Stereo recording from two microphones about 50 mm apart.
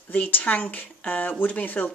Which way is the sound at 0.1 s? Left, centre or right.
Left.